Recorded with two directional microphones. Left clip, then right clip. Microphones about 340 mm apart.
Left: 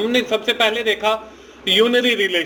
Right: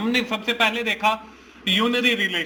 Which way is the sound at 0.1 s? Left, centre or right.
Centre.